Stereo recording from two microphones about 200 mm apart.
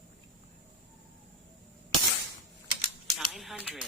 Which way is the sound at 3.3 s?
Centre (ahead or behind).